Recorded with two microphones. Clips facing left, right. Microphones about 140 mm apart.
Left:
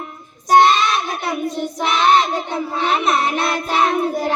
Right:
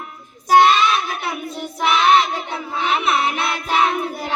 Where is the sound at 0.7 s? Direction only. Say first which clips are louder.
Even; 35° left (ahead or behind).